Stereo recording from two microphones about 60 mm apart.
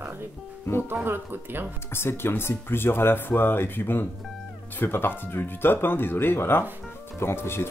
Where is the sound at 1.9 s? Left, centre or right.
Left.